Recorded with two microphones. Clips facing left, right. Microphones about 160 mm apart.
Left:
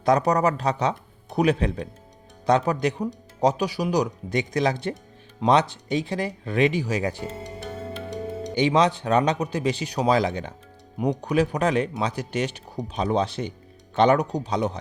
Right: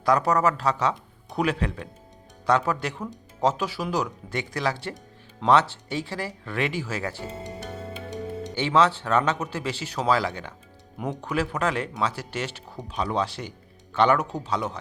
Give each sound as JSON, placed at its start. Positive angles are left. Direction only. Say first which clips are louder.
{"t": 0.0, "sound": "speech", "louder": "left 2 dB", "side_deg": 20}
{"t": 8.5, "sound": "speech", "louder": "left 1 dB", "side_deg": 15}